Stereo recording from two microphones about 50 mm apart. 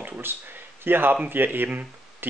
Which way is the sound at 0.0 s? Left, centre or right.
Right.